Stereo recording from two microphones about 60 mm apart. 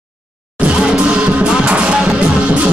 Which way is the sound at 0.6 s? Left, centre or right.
Centre.